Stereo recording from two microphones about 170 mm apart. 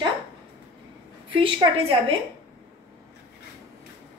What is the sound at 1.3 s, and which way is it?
Speech, 30° right (ahead or behind).